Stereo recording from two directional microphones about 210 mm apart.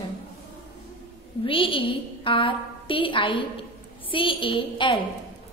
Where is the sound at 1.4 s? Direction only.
25° left (ahead or behind).